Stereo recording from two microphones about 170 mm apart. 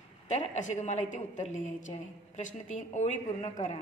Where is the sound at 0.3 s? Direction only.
45° left (ahead or behind).